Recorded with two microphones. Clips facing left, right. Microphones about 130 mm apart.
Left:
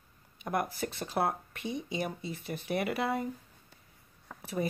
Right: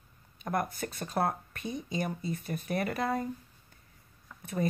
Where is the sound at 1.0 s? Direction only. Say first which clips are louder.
Right 1 dB; 5° left (ahead or behind).